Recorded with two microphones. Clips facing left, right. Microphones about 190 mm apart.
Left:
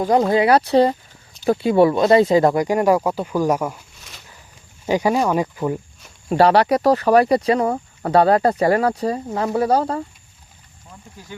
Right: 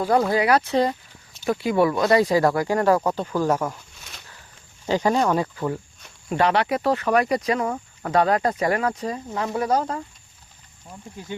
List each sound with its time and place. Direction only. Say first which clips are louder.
0.0 s speech: left 4 dB; 20° left (ahead or behind)
6.2 s speech: left 6 dB; 35° left (ahead or behind)